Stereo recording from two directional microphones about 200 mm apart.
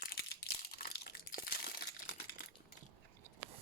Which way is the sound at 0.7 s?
50° left (ahead or behind).